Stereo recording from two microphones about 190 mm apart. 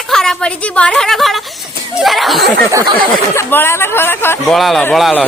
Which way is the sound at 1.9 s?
Centre (ahead or behind).